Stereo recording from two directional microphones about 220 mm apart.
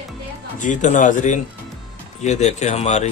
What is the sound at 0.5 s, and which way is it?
Speech, 35° left (ahead or behind).